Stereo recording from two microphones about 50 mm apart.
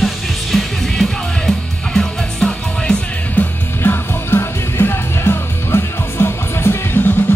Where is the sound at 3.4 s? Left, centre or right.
Left.